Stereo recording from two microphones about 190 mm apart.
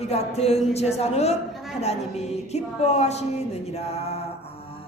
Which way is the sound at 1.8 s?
35° left (ahead or behind).